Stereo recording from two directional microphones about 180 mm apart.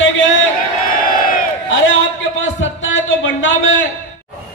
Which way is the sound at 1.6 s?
90° left.